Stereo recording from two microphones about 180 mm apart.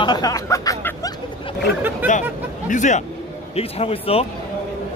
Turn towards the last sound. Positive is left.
turn(degrees=35)  # may be behind; listen again after turning